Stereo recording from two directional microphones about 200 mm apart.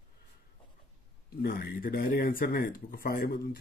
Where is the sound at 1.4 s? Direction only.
50° left (ahead or behind).